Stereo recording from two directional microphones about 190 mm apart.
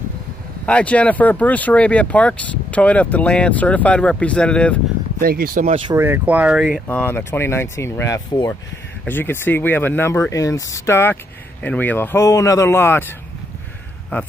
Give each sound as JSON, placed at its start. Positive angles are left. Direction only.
{"t": 0.7, "sound": "speech", "side_deg": 5}
{"t": 5.2, "sound": "speech", "side_deg": -50}
{"t": 5.9, "sound": "speech", "side_deg": -15}